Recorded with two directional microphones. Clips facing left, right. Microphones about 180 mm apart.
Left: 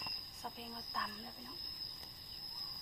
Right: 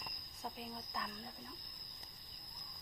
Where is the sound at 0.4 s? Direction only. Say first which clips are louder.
Right 2 dB; 5° right (ahead or behind).